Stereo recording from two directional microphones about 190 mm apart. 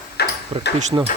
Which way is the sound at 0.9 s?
20° right (ahead or behind).